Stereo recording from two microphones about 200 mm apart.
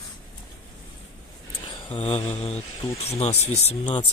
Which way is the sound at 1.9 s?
30° left (ahead or behind).